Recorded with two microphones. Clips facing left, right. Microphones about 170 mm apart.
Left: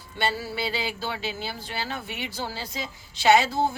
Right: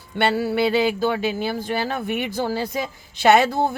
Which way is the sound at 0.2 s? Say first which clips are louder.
Right 9 dB; 60° right (ahead or behind).